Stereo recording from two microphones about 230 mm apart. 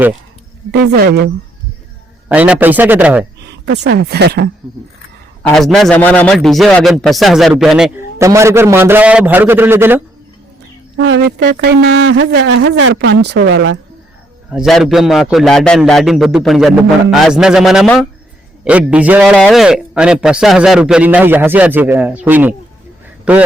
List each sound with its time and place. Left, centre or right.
0.7 s speech: right
2.3 s a man's voice: centre
3.4 s speech: right
5.4 s a man's voice: centre
8.2 s a man's voice: centre
10.9 s speech: right
14.5 s a man's voice: centre